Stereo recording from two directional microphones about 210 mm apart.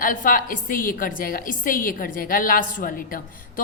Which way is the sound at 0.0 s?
40° left (ahead or behind).